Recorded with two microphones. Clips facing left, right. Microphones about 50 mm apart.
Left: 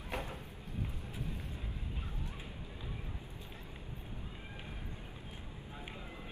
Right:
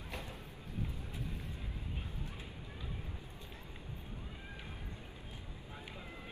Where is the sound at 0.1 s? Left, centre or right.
Left.